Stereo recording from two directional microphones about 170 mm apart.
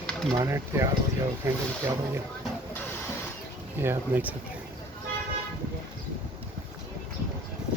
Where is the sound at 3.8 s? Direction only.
10° right (ahead or behind).